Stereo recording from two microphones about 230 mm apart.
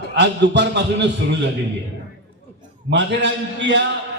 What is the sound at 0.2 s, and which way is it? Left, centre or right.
A man's voice, right.